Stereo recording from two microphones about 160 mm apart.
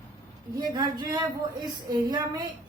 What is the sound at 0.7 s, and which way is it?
A woman's voice, 25° right (ahead or behind).